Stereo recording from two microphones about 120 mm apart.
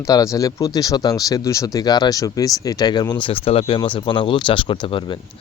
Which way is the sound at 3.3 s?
50° left (ahead or behind).